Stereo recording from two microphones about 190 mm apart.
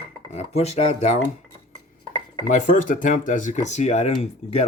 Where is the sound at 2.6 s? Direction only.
45° left (ahead or behind).